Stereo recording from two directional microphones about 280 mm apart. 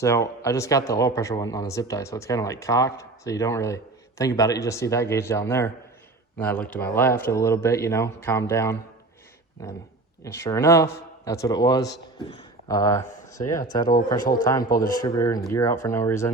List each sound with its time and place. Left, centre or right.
0.0 s speech: centre
10.2 s speech: centre
14.2 s a man's voice: left
14.8 s speech: centre